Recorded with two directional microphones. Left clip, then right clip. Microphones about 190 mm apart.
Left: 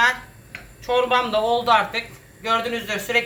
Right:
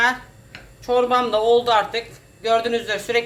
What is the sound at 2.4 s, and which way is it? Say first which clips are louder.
Speech: right 3 dB; 70° right (ahead or behind).